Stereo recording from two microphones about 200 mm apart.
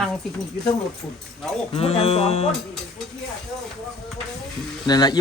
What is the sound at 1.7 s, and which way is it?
Speech, 30° left (ahead or behind).